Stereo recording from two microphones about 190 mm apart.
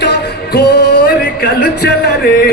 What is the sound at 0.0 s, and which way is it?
Music, 60° left (ahead or behind).